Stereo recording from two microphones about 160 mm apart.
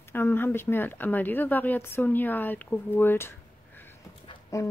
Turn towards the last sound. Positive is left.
turn(degrees=20)  # may be behind; listen again after turning